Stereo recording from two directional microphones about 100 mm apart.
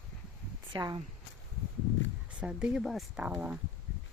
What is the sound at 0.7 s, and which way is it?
Speech, 45° right (ahead or behind).